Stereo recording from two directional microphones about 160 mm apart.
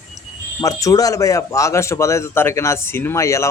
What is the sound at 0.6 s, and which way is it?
Speech, 20° left (ahead or behind).